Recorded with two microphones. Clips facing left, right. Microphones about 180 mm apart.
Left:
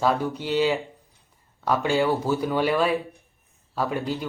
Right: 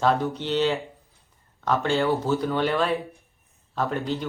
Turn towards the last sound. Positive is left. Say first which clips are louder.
# even
turn(degrees=10)  # may be behind; listen again after turning